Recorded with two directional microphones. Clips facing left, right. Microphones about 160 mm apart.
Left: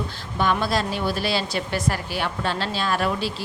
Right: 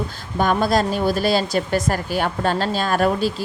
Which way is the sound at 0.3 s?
45° right (ahead or behind).